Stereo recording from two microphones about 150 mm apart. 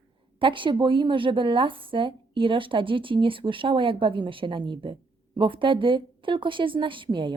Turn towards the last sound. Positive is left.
turn(degrees=-35)  # may be behind; listen again after turning